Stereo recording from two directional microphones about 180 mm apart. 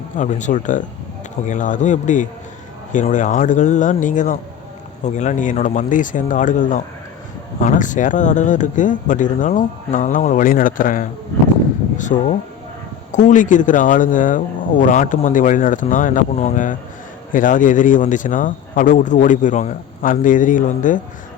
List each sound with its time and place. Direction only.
0.2 s speech: 45° left (ahead or behind)